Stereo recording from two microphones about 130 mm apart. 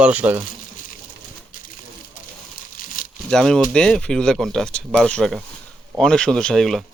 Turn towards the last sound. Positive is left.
turn(degrees=5)  # may be behind; listen again after turning